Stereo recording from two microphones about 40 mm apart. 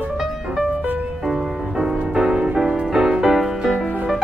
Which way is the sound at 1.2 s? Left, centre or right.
Centre.